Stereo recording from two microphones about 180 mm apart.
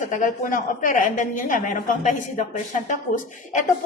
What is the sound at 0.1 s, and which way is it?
A woman's voice, 45° left (ahead or behind).